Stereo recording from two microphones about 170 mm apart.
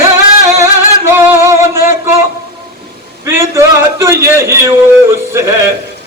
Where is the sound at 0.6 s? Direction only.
15° right (ahead or behind).